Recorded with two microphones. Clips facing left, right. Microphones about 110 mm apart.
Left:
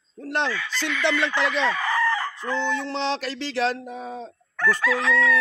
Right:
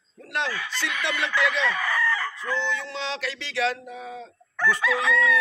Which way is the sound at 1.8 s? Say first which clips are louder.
Left 3 dB; 25° left (ahead or behind).